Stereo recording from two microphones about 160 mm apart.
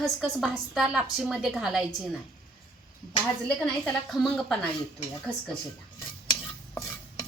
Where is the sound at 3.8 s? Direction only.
Centre (ahead or behind).